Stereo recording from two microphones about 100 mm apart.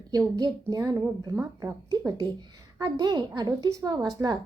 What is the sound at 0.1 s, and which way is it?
Speech, 40° right (ahead or behind).